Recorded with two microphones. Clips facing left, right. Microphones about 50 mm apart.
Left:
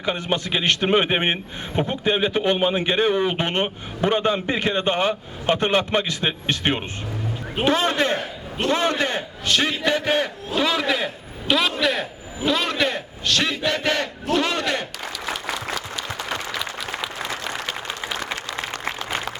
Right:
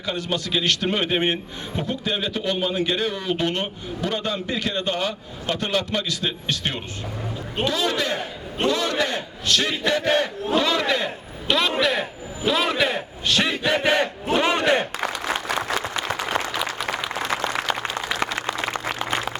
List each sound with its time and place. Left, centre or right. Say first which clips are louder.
0.0 s a man's voice: left 2 dB; left
10.5 s a man's voice: right 1 dB; centre
12.5 s a sound: right 1 dB; centre
13.7 s battle cry: right 2 dB; centre